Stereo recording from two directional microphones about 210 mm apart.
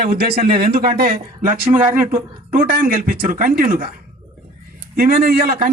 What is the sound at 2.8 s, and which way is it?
Speech, 40° right (ahead or behind).